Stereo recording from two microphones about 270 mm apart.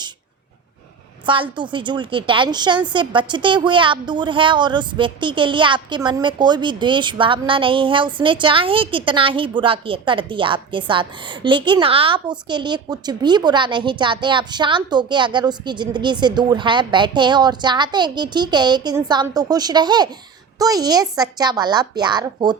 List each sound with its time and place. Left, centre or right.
1.2 s a woman's voice: centre